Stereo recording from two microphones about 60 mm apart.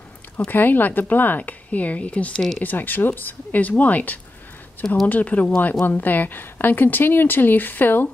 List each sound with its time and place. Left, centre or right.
0.5 s a woman's voice: left